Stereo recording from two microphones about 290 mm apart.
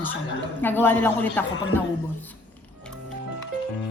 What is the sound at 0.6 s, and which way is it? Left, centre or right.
A man's voice, centre.